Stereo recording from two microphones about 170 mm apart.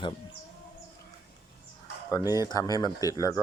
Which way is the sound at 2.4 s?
20° left (ahead or behind).